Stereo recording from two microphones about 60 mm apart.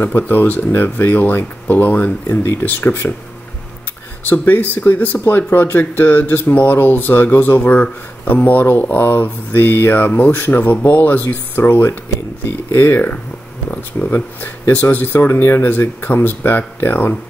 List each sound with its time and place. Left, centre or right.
0.0 s speech: left
4.2 s speech: left